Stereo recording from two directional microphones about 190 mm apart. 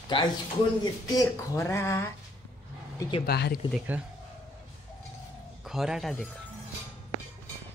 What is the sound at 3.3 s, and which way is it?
Speech, 55° left (ahead or behind).